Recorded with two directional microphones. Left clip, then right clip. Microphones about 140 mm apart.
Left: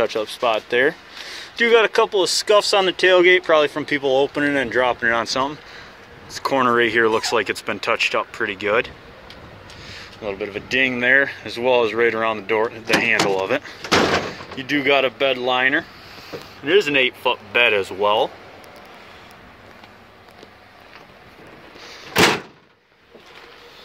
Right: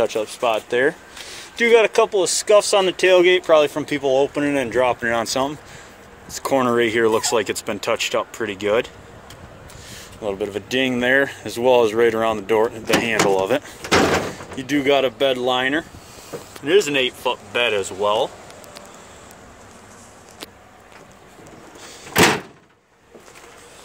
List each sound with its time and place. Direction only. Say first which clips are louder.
0.0 s speech: even; centre (ahead or behind)
4.0 s speech: right 1 dB; 5° left (ahead or behind)
4.6 s speech: right 1 dB; 10° right (ahead or behind)
9.8 s speech: right 2 dB; 45° right (ahead or behind)
13.5 s speech: right 1 dB; 30° right (ahead or behind)
16.6 s speech: left 1 dB; centre (ahead or behind); by 18.3 s 15° left (ahead or behind)